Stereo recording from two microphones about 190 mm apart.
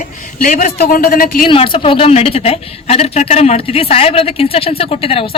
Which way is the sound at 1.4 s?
25° left (ahead or behind).